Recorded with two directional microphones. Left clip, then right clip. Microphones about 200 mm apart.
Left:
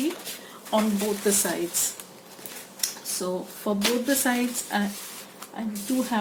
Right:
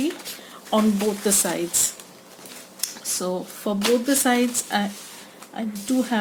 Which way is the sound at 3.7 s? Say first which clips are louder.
Right 3 dB; 55° right (ahead or behind).